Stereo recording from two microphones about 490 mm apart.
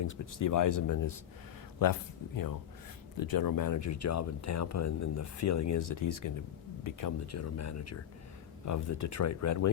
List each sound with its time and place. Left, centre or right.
0.0 s speech: left
2.3 s speech: left